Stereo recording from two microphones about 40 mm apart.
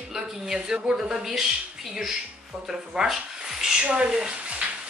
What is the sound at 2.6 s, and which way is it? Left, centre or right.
Speech, centre.